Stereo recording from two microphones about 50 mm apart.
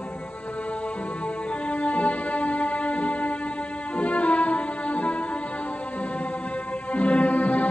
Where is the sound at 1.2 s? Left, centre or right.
Left.